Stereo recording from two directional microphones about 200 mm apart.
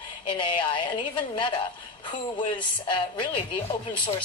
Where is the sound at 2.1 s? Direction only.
25° left (ahead or behind).